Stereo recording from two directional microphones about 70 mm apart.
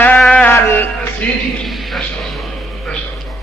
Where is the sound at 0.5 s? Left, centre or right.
Left.